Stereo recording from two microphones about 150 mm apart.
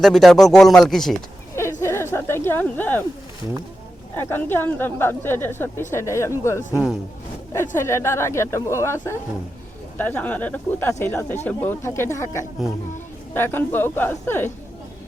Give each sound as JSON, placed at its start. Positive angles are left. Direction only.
{"t": 0.0, "sound": "speech", "side_deg": 0}
{"t": 1.8, "sound": "a sound", "side_deg": 15}
{"t": 4.2, "sound": "a woman's voice", "side_deg": 15}